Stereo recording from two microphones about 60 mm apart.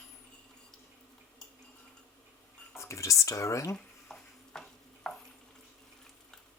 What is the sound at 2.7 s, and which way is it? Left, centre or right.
Speech, left.